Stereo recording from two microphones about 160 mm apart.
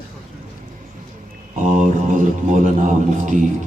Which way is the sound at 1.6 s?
50° right (ahead or behind).